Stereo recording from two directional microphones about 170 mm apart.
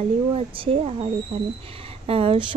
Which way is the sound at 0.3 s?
35° right (ahead or behind).